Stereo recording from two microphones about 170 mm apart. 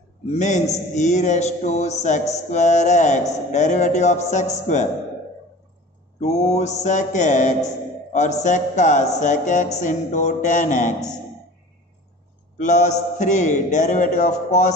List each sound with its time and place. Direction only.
0.3 s mantra: 45° left (ahead or behind)
6.1 s mantra: 40° left (ahead or behind)
12.5 s mantra: 45° left (ahead or behind)